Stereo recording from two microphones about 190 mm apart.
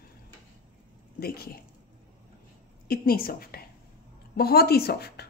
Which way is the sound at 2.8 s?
50° left (ahead or behind).